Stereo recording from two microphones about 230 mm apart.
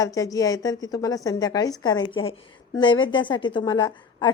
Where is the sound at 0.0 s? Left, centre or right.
Centre.